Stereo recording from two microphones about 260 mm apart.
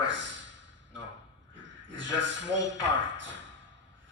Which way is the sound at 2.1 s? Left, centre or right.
Right.